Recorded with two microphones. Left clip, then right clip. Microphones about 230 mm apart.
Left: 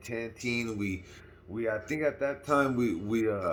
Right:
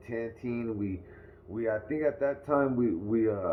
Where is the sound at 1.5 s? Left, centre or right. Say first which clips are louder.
Right 1 dB; left.